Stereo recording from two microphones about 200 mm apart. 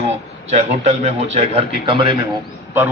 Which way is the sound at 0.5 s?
35° right (ahead or behind).